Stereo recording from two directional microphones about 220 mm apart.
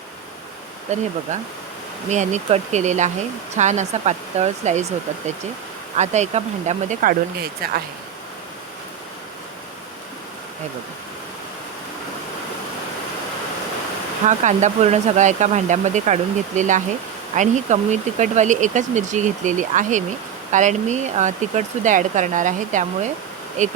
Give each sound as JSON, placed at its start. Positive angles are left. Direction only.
{"t": 0.9, "sound": "speech", "side_deg": -30}
{"t": 6.0, "sound": "speech", "side_deg": -30}
{"t": 14.3, "sound": "speech", "side_deg": -35}